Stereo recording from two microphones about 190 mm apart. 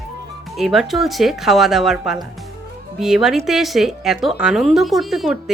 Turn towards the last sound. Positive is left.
turn(degrees=0)  # may be behind; listen again after turning